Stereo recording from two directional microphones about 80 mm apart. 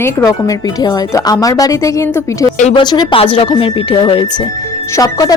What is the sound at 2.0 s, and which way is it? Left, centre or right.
Speech, left.